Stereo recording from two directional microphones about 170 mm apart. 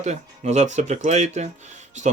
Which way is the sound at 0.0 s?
40° right (ahead or behind).